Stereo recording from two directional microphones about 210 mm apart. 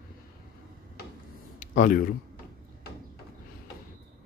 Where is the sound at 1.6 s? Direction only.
40° left (ahead or behind).